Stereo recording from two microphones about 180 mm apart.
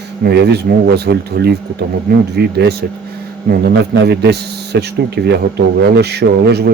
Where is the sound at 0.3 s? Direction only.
65° right (ahead or behind).